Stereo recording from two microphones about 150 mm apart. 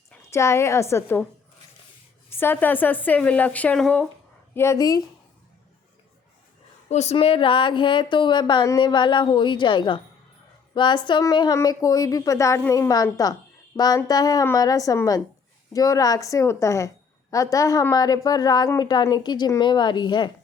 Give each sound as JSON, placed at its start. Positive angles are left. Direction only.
{"t": 0.3, "sound": "a woman's voice", "side_deg": 20}
{"t": 2.4, "sound": "speech", "side_deg": 15}
{"t": 4.5, "sound": "a woman's voice", "side_deg": 20}
{"t": 6.8, "sound": "a woman's voice", "side_deg": 50}